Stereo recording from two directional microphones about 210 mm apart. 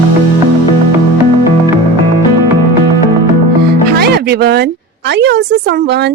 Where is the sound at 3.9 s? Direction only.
50° right (ahead or behind).